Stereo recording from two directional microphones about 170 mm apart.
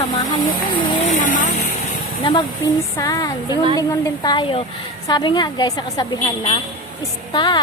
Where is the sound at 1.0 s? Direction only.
45° left (ahead or behind).